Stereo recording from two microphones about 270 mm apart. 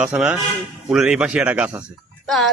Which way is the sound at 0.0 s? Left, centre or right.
Centre.